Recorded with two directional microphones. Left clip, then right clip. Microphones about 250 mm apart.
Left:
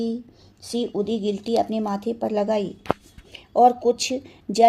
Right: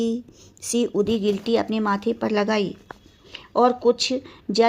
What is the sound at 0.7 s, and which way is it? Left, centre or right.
Speech, right.